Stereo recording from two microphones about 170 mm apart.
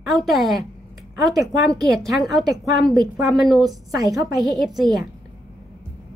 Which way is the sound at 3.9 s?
20° right (ahead or behind).